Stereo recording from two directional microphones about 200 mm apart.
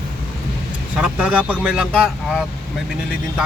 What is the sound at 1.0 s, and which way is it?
Speech, 5° right (ahead or behind).